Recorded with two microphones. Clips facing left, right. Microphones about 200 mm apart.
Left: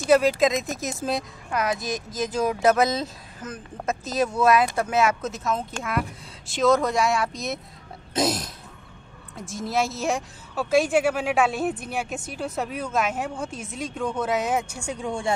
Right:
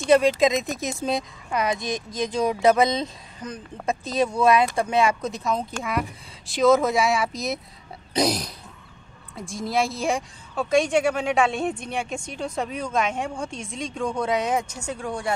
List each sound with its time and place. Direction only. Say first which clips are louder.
0.0 s a woman's voice: right 1 dB; 5° left (ahead or behind)
8.1 s a sound: right 1 dB; centre (ahead or behind)
9.3 s a woman's voice: right 1 dB; centre (ahead or behind); by 15.3 s 25° left (ahead or behind)